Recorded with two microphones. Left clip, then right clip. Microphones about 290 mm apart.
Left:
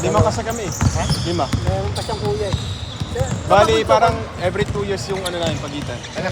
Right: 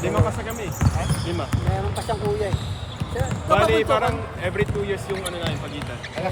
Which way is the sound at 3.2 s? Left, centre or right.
Centre.